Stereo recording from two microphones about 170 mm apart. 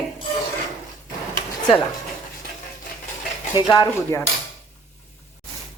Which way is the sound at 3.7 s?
20° left (ahead or behind).